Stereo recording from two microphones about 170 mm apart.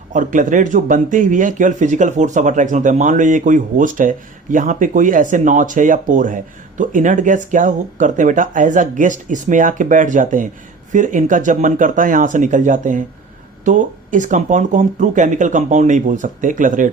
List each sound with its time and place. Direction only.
0.1 s speech: 50° right (ahead or behind)